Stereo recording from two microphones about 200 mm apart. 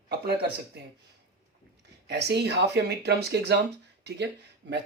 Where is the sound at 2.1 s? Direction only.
55° right (ahead or behind).